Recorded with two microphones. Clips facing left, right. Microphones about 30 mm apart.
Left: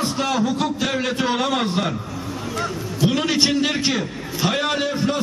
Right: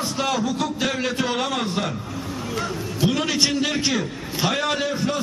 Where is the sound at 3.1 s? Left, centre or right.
Centre.